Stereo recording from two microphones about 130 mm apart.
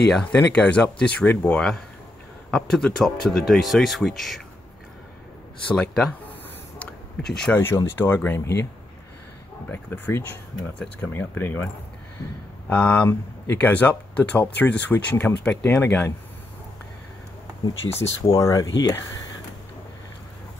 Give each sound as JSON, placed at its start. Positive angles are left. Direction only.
{"t": 0.1, "sound": "speech", "side_deg": 10}
{"t": 5.7, "sound": "speech", "side_deg": 5}
{"t": 6.8, "sound": "a sound", "side_deg": 5}
{"t": 7.6, "sound": "speech", "side_deg": 15}
{"t": 9.7, "sound": "speech", "side_deg": 15}
{"t": 17.9, "sound": "speech", "side_deg": 25}